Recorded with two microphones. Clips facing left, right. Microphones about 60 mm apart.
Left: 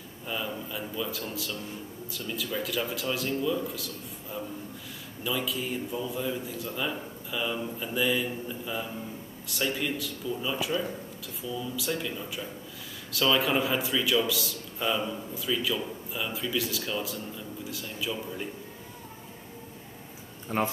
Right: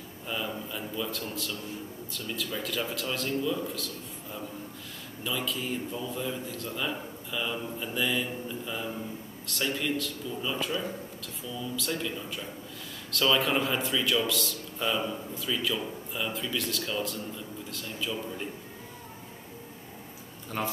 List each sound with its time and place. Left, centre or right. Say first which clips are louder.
0.3 s a man's voice: even; centre
20.4 s speech: left 4 dB; left